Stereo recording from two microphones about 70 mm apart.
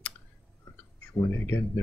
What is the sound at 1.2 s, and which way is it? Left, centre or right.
Speech, left.